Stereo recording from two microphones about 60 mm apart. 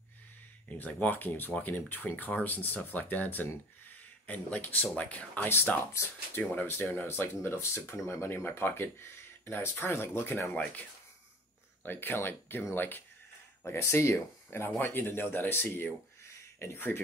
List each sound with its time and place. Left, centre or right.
1.0 s speech: left
10.5 s speech: left
11.8 s speech: left
13.7 s speech: left